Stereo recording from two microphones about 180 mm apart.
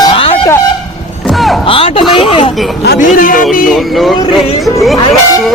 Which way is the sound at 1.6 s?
30° left (ahead or behind).